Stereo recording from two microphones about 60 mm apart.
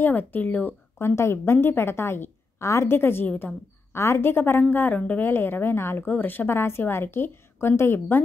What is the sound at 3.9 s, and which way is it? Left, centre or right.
A woman's voice, left.